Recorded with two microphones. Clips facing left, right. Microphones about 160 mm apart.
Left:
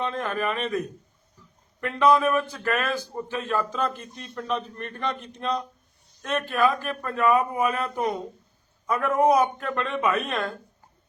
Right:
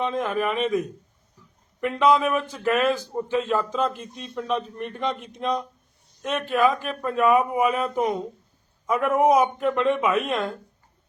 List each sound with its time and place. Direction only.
0.0 s a man's voice: 15° right (ahead or behind)